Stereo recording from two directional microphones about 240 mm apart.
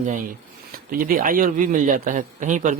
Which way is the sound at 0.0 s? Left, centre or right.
Right.